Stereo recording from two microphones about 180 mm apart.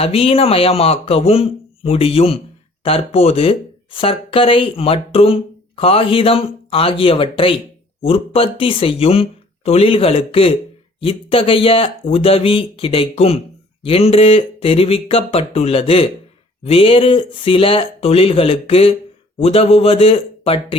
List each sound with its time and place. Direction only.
0.0 s speech: 30° left (ahead or behind)